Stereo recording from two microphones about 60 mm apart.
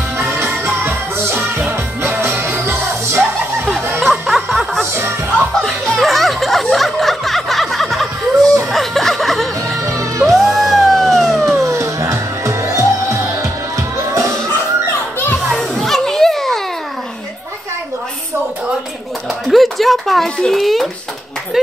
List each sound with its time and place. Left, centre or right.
0.2 s music: right
1.6 s music: right
4.0 s music: centre
5.6 s snicker: centre
8.7 s music: centre
9.9 s music: right
10.3 s music: centre
11.1 s a sound: centre
11.5 s music: right
15.5 s children playing: centre
19.5 s speech: centre